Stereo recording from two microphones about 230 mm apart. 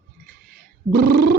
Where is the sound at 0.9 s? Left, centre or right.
Right.